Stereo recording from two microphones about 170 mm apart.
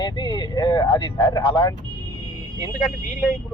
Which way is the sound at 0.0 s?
25° left (ahead or behind).